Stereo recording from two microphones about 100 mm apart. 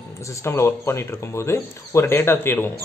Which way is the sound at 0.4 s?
25° left (ahead or behind).